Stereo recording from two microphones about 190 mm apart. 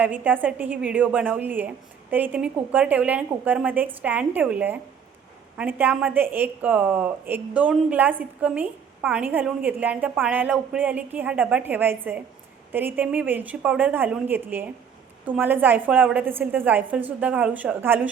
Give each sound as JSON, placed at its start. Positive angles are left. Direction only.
{"t": 0.0, "sound": "a woman's voice", "side_deg": -10}